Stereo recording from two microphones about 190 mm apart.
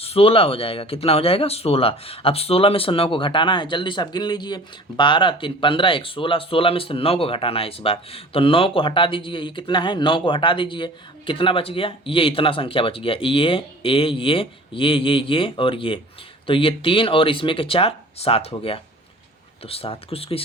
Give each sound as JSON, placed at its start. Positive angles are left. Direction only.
{"t": 0.0, "sound": "speech", "side_deg": 30}